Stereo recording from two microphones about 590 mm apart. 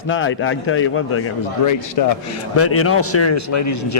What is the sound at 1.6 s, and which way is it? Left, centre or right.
A man's voice, left.